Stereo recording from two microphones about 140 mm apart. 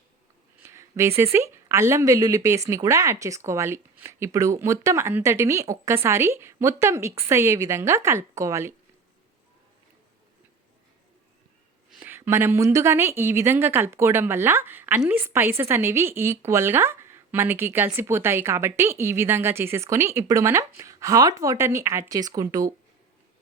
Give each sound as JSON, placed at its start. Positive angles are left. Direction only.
{"t": 0.6, "sound": "speech", "side_deg": -20}
{"t": 11.9, "sound": "a woman's voice", "side_deg": -10}